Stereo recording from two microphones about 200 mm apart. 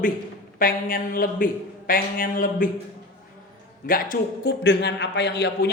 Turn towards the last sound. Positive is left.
turn(degrees=55)  # may be behind; listen again after turning